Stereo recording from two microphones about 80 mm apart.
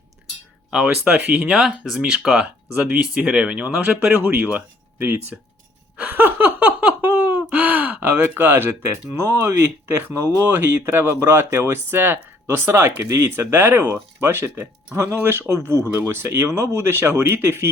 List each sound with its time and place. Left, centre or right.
0.7 s speech: centre
2.7 s speech: centre
6.0 s laughter: right
9.0 s speech: right
13.1 s speech: right
13.5 s speech: right